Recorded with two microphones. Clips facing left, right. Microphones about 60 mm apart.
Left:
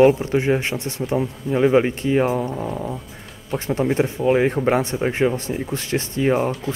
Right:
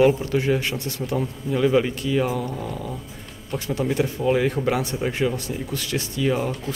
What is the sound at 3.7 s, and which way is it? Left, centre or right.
Speech, left.